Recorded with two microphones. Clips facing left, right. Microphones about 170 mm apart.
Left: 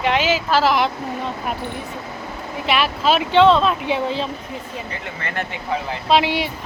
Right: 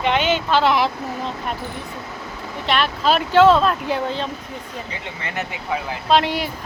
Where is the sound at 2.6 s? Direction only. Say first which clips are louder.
Left 1 dB; 5° left (ahead or behind).